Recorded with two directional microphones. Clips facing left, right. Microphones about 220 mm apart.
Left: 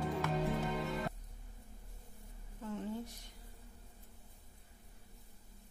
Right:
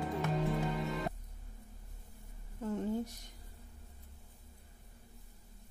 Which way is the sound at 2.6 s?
40° right (ahead or behind).